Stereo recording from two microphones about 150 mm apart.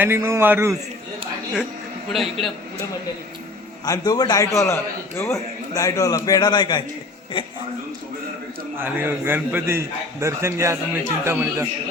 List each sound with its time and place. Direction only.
0.0 s a man's voice: 15° right (ahead or behind)
2.1 s a man's voice: centre (ahead or behind)
3.8 s a man's voice: 25° left (ahead or behind)
8.8 s a man's voice: 15° right (ahead or behind)